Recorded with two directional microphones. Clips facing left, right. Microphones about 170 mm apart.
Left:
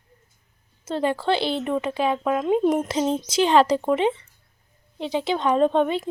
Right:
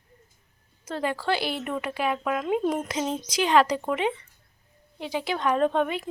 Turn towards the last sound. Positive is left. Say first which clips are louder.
# left 4 dB
turn(degrees=25)  # may be behind; listen again after turning